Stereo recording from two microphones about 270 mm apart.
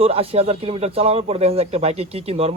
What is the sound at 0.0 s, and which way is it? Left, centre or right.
Speech, right.